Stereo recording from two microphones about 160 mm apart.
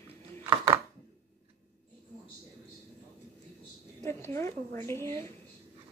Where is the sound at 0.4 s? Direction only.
30° right (ahead or behind).